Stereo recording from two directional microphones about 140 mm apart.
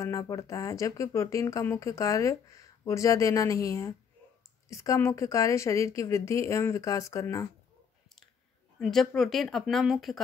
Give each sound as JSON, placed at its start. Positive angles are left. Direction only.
{"t": 0.0, "sound": "speech", "side_deg": 25}
{"t": 8.7, "sound": "speech", "side_deg": 0}